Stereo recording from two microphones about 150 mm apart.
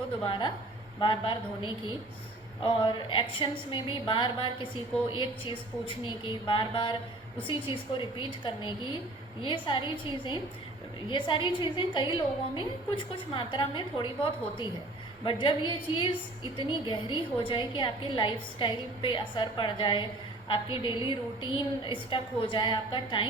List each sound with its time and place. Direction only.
0.3 s a woman's voice: 35° left (ahead or behind)